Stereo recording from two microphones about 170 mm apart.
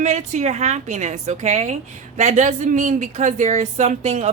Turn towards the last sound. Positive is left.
turn(degrees=-40)  # may be behind; listen again after turning